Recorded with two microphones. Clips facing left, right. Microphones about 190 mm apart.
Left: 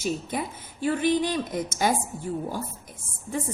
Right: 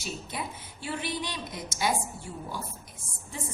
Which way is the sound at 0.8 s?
45° left (ahead or behind).